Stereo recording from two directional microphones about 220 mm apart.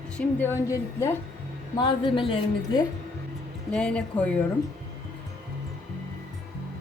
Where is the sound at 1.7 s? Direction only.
20° left (ahead or behind).